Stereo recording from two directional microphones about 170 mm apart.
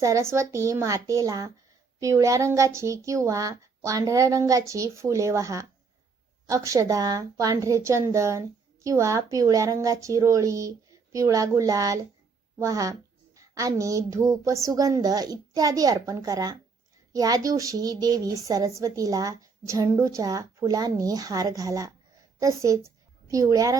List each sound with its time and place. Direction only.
0.0 s a woman's voice: 15° right (ahead or behind)